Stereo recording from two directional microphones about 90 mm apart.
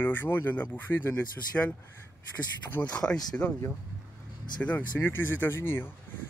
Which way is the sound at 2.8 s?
10° left (ahead or behind).